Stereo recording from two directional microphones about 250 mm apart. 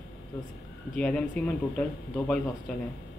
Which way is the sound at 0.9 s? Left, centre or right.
Centre.